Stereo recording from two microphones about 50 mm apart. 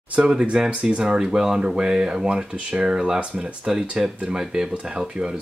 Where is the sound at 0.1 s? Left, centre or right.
Right.